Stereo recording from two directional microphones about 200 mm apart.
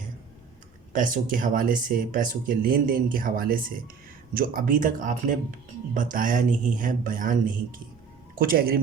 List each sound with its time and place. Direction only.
0.9 s speech: 40° right (ahead or behind)